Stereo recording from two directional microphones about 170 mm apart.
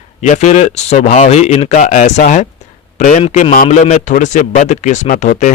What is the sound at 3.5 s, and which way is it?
Speech, 50° left (ahead or behind).